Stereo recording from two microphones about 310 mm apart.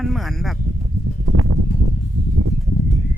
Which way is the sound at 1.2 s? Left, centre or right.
Right.